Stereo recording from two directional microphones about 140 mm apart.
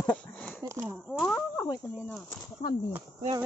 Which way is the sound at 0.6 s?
20° right (ahead or behind).